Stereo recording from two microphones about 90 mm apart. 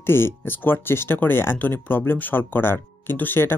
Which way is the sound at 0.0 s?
25° left (ahead or behind).